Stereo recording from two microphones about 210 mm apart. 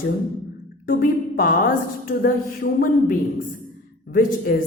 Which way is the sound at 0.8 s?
40° left (ahead or behind).